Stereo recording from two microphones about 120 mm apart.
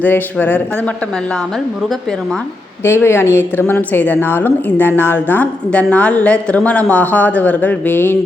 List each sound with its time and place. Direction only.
0.0 s speech: 15° left (ahead or behind)
2.8 s speech: 20° left (ahead or behind)